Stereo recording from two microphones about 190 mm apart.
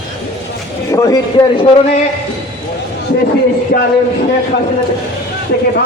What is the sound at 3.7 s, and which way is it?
Speech, 45° left (ahead or behind).